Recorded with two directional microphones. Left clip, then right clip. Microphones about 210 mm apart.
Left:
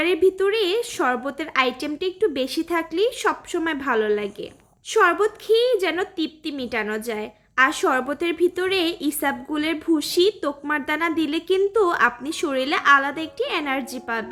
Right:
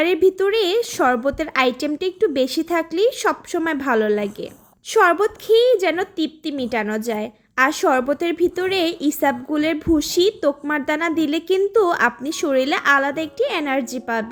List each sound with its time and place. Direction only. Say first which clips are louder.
0.0 s a woman's voice: right 2 dB; 20° right (ahead or behind)